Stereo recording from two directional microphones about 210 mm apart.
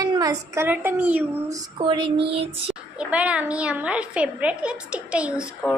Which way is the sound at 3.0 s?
5° right (ahead or behind).